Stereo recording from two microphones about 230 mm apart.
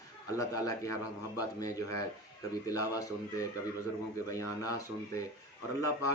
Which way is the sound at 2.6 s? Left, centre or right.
Centre.